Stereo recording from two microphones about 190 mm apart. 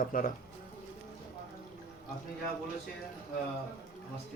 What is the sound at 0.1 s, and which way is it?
Speech, 45° left (ahead or behind).